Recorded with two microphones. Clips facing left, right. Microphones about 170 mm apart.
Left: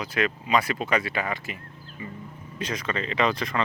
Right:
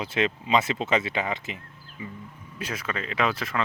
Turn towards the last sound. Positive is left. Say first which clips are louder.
# left 2 dB
turn(degrees=-5)  # may be behind; listen again after turning